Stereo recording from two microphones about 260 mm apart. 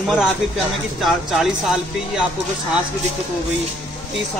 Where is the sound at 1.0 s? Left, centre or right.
Centre.